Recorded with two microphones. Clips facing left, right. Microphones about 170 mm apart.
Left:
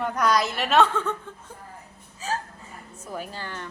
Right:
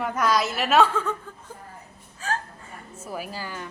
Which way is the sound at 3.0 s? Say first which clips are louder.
Right 1 dB; 10° right (ahead or behind).